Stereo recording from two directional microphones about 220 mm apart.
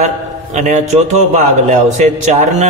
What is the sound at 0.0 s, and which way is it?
A man's voice, 30° right (ahead or behind).